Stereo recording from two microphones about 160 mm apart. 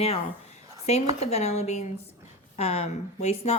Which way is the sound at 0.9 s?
45° left (ahead or behind).